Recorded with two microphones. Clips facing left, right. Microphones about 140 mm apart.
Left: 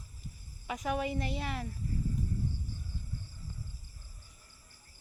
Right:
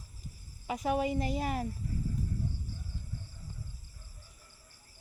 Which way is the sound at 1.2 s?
40° right (ahead or behind).